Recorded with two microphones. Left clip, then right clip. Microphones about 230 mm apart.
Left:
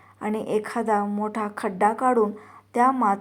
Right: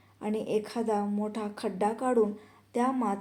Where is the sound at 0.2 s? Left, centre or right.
Centre.